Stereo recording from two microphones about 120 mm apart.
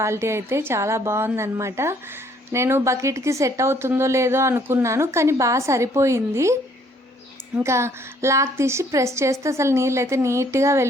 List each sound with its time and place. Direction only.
0.0 s speech: 20° right (ahead or behind)
7.6 s speech: 25° right (ahead or behind)